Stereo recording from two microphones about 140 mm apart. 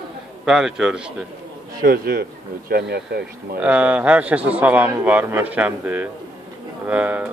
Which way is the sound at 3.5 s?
10° right (ahead or behind).